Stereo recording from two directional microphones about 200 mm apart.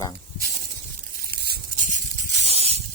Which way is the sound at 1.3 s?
50° right (ahead or behind).